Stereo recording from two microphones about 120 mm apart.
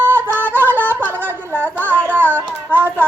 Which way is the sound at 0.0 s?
20° right (ahead or behind).